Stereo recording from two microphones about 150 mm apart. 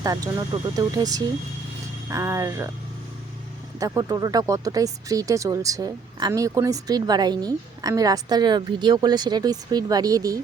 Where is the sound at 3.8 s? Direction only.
25° right (ahead or behind).